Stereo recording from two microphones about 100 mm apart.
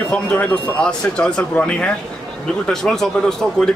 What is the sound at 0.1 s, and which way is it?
A man's voice, 20° left (ahead or behind).